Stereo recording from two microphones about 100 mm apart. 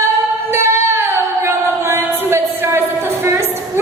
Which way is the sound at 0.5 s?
25° right (ahead or behind).